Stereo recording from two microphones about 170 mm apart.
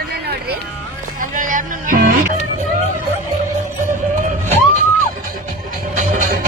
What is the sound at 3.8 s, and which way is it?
Music, 50° right (ahead or behind).